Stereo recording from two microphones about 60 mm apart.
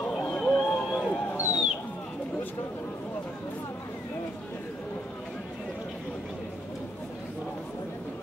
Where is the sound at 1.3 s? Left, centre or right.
Left.